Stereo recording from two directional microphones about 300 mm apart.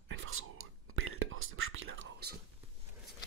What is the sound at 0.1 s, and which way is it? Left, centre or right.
Whispering, right.